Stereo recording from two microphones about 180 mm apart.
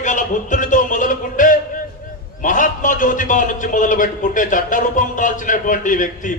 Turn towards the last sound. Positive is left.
turn(degrees=45)  # may be behind; listen again after turning